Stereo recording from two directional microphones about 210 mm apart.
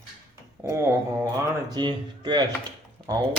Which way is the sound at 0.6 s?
15° right (ahead or behind).